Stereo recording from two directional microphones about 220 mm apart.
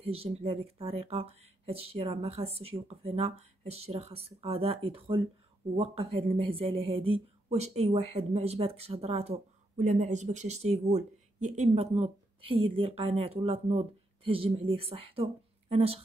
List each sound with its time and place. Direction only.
0.0 s speech: 25° right (ahead or behind)